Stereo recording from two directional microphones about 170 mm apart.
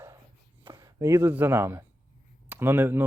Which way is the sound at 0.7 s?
20° right (ahead or behind).